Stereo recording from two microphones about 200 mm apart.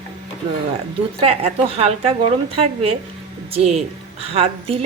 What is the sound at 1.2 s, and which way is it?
Speech, 30° right (ahead or behind).